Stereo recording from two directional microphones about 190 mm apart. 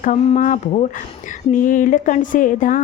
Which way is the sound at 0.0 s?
40° left (ahead or behind).